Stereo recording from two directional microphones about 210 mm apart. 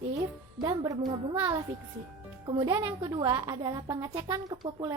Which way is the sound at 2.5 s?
20° right (ahead or behind).